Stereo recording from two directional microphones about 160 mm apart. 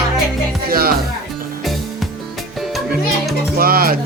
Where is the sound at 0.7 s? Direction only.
70° right (ahead or behind).